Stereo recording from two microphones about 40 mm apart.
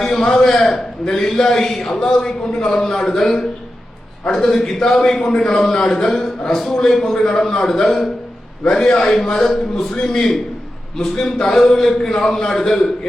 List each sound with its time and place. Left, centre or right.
0.0 s a man's voice: centre
4.6 s a man's voice: centre
6.1 s a man's voice: centre
8.6 s a man's voice: left
9.0 s a man's voice: centre